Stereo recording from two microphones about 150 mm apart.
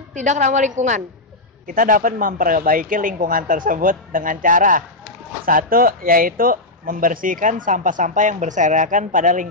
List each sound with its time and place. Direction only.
0.1 s a woman's voice: 55° right (ahead or behind)
1.7 s speech: 70° right (ahead or behind)